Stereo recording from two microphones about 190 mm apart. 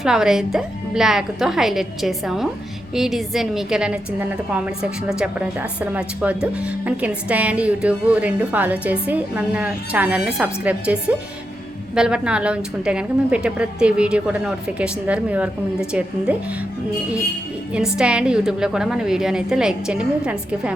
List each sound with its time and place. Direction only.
0.0 s a woman's voice: 5° right (ahead or behind)
17.9 s a woman's voice: 5° right (ahead or behind)